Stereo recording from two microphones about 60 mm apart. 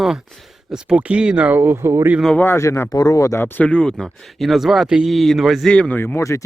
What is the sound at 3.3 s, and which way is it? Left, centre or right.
Speech, left.